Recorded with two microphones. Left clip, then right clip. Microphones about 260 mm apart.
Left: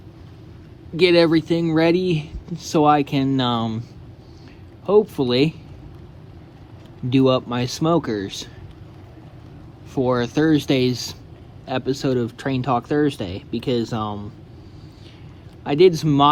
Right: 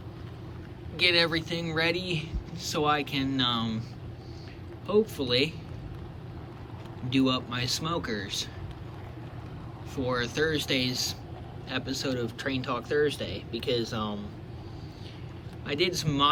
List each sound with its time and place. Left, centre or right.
0.9 s speech: centre
4.9 s speech: centre
7.1 s speech: centre
9.9 s speech: centre
15.6 s speech: centre